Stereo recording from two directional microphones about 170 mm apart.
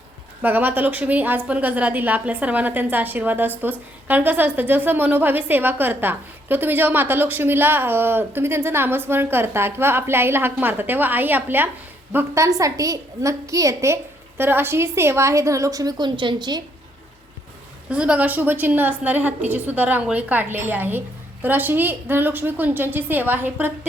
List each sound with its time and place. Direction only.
0.4 s a woman's voice: 10° right (ahead or behind)
17.8 s a woman's voice: 5° right (ahead or behind)